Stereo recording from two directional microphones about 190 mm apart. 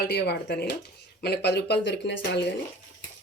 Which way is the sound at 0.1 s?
60° left (ahead or behind).